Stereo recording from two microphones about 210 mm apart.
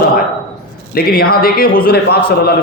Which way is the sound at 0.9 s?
45° left (ahead or behind).